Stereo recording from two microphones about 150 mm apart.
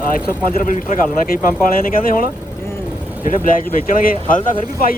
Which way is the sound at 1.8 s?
75° left (ahead or behind).